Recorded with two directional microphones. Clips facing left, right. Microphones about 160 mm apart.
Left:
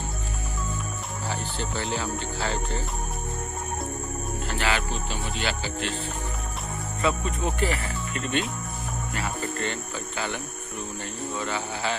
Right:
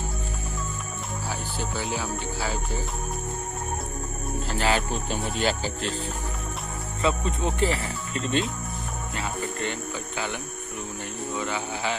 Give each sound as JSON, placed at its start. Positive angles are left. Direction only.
{"t": 1.3, "sound": "cricket", "side_deg": -10}
{"t": 4.5, "sound": "speech", "side_deg": -40}
{"t": 7.0, "sound": "speech", "side_deg": -25}
{"t": 9.1, "sound": "cricket", "side_deg": -20}